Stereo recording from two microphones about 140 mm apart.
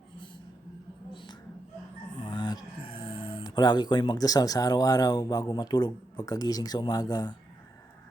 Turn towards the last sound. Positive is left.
turn(degrees=25)  # may be behind; listen again after turning